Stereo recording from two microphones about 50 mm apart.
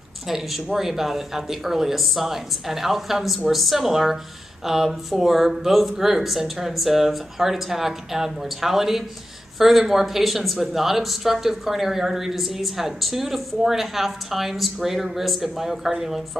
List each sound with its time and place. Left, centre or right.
0.3 s speech: centre